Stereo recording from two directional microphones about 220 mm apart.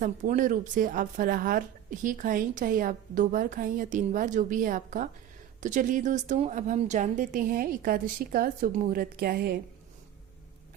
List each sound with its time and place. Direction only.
0.0 s a woman's voice: 35° right (ahead or behind)